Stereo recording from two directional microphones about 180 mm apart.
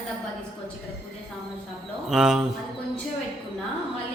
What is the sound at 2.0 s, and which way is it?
Speech, 5° right (ahead or behind).